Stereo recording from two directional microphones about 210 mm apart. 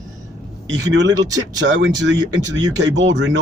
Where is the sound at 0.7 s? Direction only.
55° right (ahead or behind).